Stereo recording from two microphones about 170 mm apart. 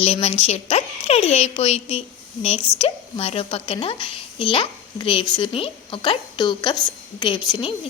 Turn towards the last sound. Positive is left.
turn(degrees=25)  # may be behind; listen again after turning